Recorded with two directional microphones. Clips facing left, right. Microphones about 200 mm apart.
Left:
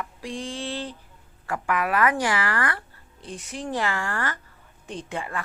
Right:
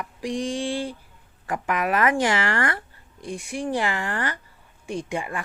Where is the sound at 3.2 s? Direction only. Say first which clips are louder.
Right 5 dB; 10° right (ahead or behind).